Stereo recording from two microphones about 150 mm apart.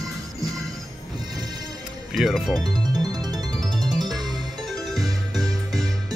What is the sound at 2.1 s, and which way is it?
Speech, centre (ahead or behind).